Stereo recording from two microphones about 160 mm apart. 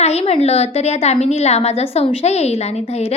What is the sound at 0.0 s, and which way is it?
A woman's voice, 40° left (ahead or behind).